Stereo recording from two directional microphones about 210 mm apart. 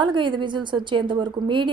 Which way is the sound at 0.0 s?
20° right (ahead or behind).